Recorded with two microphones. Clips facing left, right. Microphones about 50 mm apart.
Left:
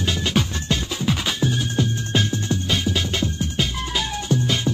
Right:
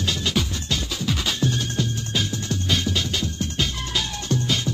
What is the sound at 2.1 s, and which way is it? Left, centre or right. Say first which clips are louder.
Music: left 4 dB; left.